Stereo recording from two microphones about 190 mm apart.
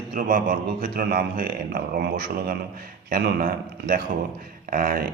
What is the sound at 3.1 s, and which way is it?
Speech, 50° right (ahead or behind).